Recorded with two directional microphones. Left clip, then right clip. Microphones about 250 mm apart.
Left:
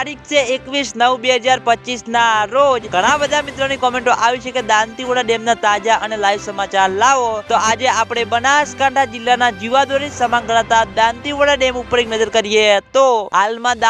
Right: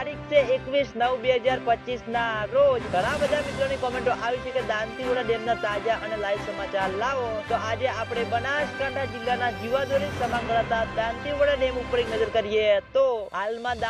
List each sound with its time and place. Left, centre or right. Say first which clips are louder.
0.0 s speech: left 6 dB; left